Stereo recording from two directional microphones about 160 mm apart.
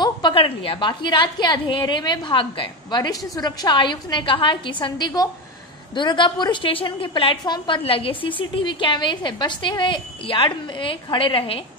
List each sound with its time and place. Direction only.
0.0 s a woman's voice: 30° left (ahead or behind)